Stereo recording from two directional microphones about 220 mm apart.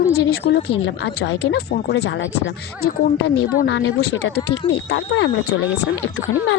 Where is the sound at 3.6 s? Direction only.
50° left (ahead or behind).